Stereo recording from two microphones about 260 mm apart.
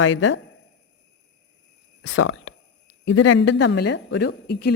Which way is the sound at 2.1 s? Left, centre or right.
Left.